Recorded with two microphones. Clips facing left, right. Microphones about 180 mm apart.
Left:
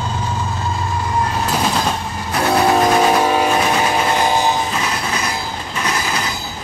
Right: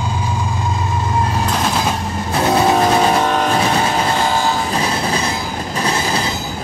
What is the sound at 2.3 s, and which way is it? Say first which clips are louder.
Train: right 1 dB; 20° right (ahead or behind).